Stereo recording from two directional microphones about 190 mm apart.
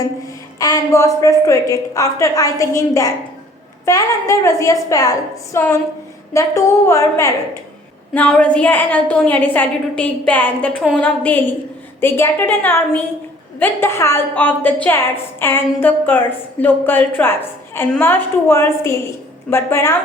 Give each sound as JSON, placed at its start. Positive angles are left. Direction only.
{"t": 0.6, "sound": "a woman's voice", "side_deg": 20}